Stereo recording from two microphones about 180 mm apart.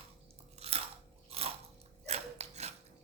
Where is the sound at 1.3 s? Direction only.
35° right (ahead or behind).